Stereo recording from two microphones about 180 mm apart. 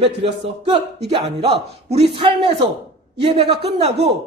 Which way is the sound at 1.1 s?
30° right (ahead or behind).